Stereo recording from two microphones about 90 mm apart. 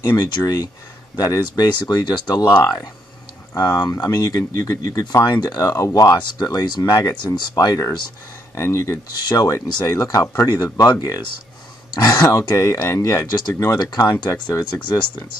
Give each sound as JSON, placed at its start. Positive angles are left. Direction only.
{"t": 0.0, "sound": "speech", "side_deg": 50}
{"t": 3.5, "sound": "speech", "side_deg": 40}
{"t": 8.5, "sound": "speech", "side_deg": 35}